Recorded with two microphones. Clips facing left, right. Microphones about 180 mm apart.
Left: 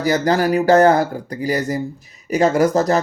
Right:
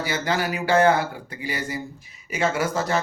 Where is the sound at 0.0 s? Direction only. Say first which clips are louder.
Left 8 dB; 40° left (ahead or behind).